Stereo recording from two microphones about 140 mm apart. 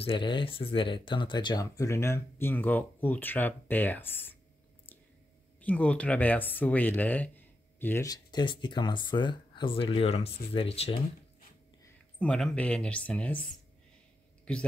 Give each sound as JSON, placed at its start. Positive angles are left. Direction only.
{"t": 0.0, "sound": "speech", "side_deg": 35}
{"t": 5.6, "sound": "speech", "side_deg": 10}
{"t": 8.1, "sound": "speech", "side_deg": 30}
{"t": 12.2, "sound": "speech", "side_deg": 10}